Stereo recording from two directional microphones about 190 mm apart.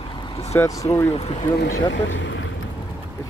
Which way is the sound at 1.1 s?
30° left (ahead or behind).